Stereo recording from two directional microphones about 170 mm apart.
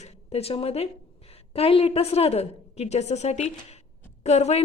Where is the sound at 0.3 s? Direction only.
35° left (ahead or behind).